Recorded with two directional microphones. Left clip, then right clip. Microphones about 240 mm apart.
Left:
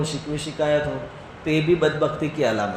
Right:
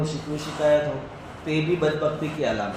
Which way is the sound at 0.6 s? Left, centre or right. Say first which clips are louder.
Right 2 dB; left.